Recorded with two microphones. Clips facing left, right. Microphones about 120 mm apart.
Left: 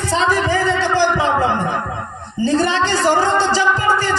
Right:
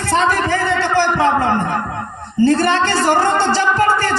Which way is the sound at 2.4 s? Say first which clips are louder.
Right 3 dB; 55° right (ahead or behind).